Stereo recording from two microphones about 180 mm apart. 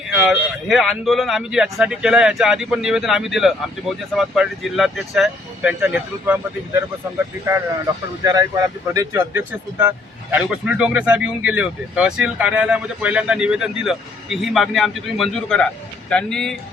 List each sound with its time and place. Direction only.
0.1 s speech: 5° right (ahead or behind)
8.2 s speech: 20° right (ahead or behind); by 16.6 s 5° left (ahead or behind)